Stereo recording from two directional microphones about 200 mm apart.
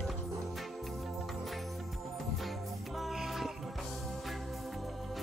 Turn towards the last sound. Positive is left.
turn(degrees=0)  # may be behind; listen again after turning